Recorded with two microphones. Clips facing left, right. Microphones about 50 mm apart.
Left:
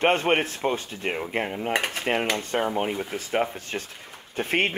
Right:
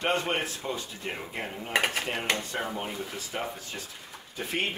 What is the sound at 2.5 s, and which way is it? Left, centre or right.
Speech, left.